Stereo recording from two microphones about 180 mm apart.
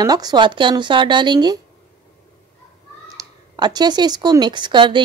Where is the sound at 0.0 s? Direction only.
20° right (ahead or behind).